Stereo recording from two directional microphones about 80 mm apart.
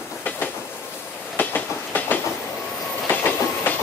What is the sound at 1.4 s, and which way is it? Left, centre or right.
Train, left.